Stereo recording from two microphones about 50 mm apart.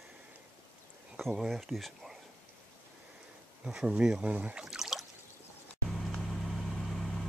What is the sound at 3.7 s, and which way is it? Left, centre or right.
Speech, centre.